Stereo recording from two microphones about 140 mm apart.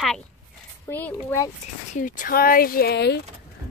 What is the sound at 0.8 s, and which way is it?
Speech, 15° left (ahead or behind).